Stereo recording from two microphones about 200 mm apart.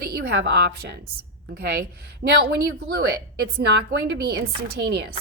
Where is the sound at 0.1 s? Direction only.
55° right (ahead or behind).